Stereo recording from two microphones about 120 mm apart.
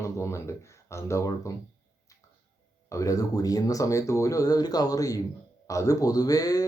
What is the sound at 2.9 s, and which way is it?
Speech, 25° left (ahead or behind).